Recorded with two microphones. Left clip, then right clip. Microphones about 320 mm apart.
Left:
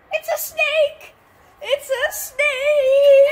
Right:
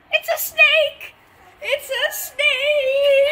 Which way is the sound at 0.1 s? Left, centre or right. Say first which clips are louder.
Right 2 dB; left.